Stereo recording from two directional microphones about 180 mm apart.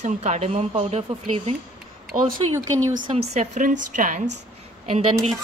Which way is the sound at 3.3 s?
45° right (ahead or behind).